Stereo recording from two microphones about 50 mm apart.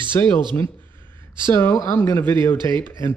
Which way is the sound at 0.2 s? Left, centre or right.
Left.